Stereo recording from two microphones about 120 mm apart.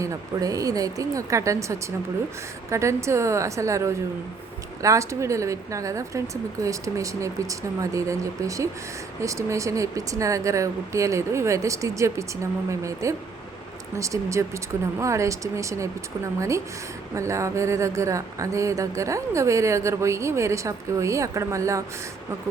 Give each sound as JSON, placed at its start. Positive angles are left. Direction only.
{"t": 0.0, "sound": "speech", "side_deg": -30}